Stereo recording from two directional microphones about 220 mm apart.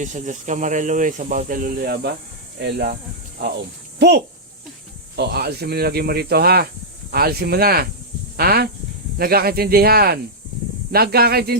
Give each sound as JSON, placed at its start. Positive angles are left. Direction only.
{"t": 0.0, "sound": "speech", "side_deg": -35}
{"t": 3.9, "sound": "speech", "side_deg": -50}